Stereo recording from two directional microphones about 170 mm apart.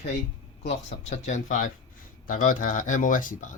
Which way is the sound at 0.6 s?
45° left (ahead or behind).